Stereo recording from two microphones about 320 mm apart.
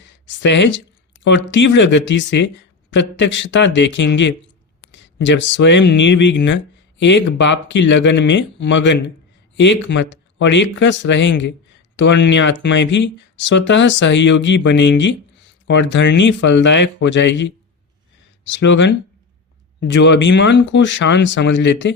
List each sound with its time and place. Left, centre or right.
0.3 s speech: left